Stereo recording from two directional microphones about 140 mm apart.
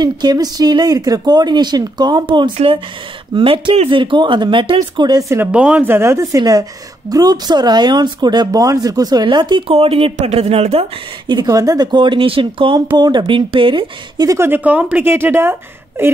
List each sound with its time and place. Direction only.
0.0 s speech: 30° right (ahead or behind)
5.4 s speech: 10° right (ahead or behind); by 10.9 s 45° right (ahead or behind)
11.2 s speech: 30° right (ahead or behind)
14.2 s speech: 20° right (ahead or behind)